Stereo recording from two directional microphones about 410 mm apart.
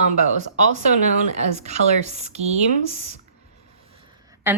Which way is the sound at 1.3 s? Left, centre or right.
Centre.